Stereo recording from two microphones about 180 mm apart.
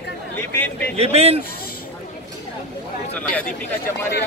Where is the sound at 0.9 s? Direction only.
35° right (ahead or behind).